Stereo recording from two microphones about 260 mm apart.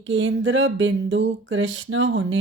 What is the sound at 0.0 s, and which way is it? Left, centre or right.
Speech, right.